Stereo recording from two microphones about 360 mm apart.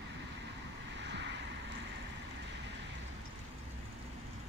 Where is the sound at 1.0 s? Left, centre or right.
Right.